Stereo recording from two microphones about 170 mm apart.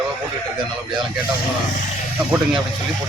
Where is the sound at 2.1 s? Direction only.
5° right (ahead or behind).